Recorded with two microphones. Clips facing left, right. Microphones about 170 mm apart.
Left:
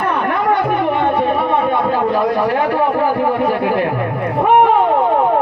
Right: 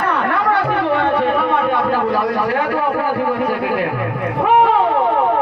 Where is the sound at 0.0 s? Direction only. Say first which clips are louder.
Left 1 dB; 15° left (ahead or behind).